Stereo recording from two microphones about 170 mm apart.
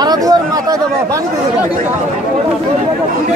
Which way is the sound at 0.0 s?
20° right (ahead or behind).